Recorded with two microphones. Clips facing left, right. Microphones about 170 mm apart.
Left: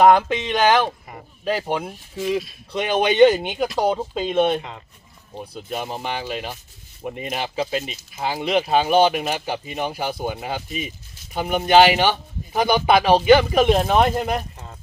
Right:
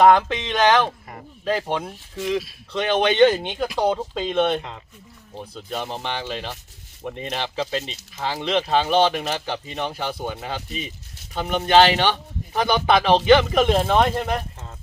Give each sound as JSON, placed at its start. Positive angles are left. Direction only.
{"t": 0.0, "sound": "speech", "side_deg": 15}